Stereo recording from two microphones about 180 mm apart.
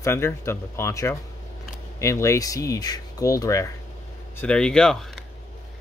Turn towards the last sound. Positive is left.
turn(degrees=5)  # may be behind; listen again after turning